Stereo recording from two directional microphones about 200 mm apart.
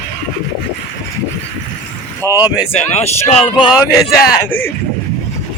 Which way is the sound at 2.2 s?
15° left (ahead or behind).